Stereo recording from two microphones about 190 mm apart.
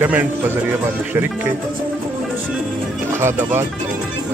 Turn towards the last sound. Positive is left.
turn(degrees=-10)  # may be behind; listen again after turning